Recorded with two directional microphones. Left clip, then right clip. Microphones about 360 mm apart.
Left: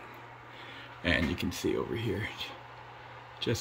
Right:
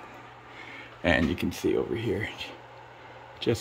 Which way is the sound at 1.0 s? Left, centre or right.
Centre.